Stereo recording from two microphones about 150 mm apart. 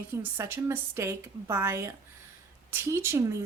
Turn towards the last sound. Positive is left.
turn(degrees=-20)  # may be behind; listen again after turning